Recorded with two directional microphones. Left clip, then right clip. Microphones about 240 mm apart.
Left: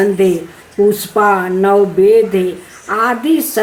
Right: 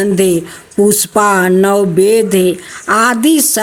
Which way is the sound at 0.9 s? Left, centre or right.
Right.